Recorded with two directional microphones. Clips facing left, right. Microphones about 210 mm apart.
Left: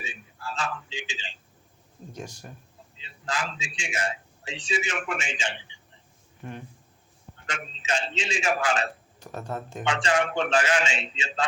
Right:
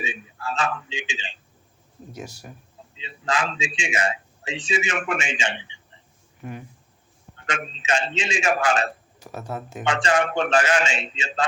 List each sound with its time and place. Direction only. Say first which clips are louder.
0.0 s a sound: right 7 dB; 80° right
1.1 s a man's voice: right 4 dB; 70° right (ahead or behind)
2.1 s speech: right 2 dB; 10° right (ahead or behind)
3.1 s a man's voice: right 6 dB; 90° right; by 5.6 s 75° right (ahead or behind)
6.4 s speech: right 3 dB; 5° right (ahead or behind)
7.4 s a man's voice: right 5 dB; 85° right
9.1 s speech: right 1 dB; 10° right (ahead or behind)
9.8 s speech: right 3 dB; 45° right (ahead or behind)